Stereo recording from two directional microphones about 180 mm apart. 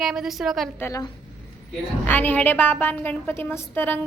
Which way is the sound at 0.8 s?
20° left (ahead or behind).